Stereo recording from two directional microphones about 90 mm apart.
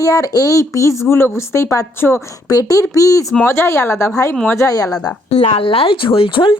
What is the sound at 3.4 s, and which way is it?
A woman's voice, 30° left (ahead or behind).